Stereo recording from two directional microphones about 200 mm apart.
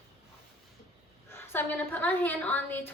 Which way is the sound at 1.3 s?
10° left (ahead or behind).